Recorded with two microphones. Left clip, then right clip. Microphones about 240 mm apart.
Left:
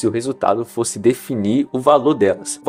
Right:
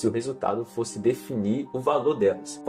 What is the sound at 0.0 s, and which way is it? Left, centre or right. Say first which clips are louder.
Speech: left 8 dB; left.